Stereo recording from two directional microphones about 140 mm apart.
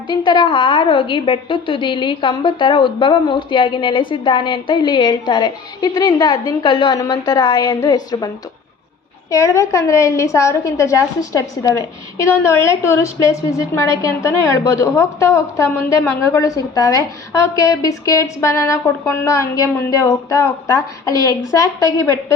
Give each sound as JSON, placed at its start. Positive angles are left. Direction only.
{"t": 0.1, "sound": "a woman's voice", "side_deg": 35}
{"t": 9.3, "sound": "a woman's voice", "side_deg": 20}